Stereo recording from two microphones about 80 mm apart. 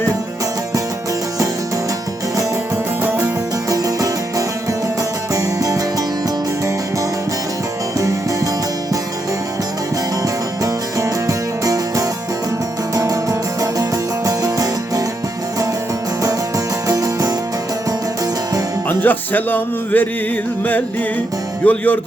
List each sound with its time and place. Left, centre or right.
3.0 s music: right
3.7 s music: right
7.9 s music: right
10.2 s music: right
16.9 s music: right
19.0 s music: left
21.6 s music: centre